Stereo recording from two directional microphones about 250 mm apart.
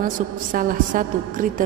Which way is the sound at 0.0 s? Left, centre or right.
Right.